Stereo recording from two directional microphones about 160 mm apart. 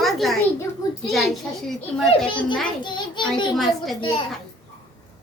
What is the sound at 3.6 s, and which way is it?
Speech, centre (ahead or behind).